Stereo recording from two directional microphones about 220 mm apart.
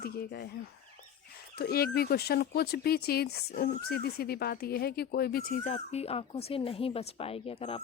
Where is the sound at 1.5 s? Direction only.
45° left (ahead or behind).